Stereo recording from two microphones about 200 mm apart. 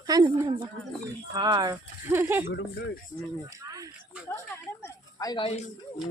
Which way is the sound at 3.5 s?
15° right (ahead or behind).